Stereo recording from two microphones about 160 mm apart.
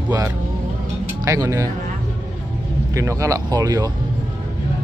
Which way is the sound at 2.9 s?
20° right (ahead or behind).